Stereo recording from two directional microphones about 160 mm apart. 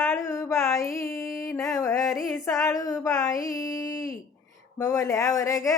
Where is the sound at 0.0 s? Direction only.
15° left (ahead or behind).